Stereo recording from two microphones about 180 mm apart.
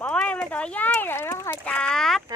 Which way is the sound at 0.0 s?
5° left (ahead or behind).